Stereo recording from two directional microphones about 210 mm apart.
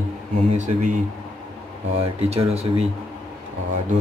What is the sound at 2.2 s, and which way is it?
Speech, 30° right (ahead or behind).